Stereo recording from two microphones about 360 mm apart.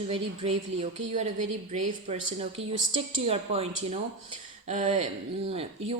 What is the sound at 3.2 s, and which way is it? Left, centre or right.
Speech, centre.